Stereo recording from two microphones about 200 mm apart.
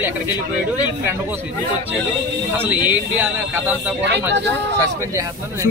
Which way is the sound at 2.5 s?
10° right (ahead or behind).